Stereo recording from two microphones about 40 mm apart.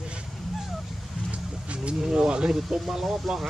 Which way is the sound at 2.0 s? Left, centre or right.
Centre.